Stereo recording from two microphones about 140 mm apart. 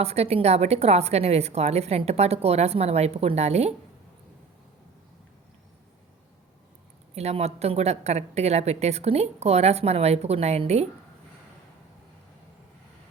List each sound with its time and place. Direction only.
0.0 s a woman's voice: 50° right (ahead or behind)
7.2 s a woman's voice: 50° right (ahead or behind)